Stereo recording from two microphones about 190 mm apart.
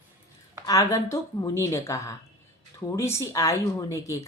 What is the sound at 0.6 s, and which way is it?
Speech, 20° left (ahead or behind).